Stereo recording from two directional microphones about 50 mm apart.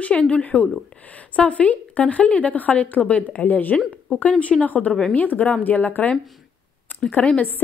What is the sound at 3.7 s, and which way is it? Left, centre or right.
A woman's voice, left.